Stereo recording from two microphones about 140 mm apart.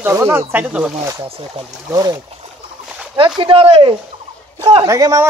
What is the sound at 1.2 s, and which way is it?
Speech, 40° right (ahead or behind).